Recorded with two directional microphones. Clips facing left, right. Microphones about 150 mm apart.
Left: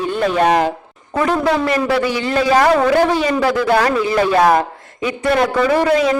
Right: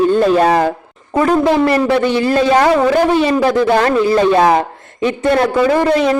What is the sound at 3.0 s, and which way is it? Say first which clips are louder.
Speech: right 3 dB; 20° right (ahead or behind).